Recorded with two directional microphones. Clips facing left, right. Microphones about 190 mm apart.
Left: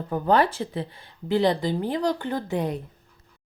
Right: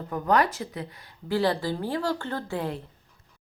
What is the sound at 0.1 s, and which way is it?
A woman's voice, 30° left (ahead or behind).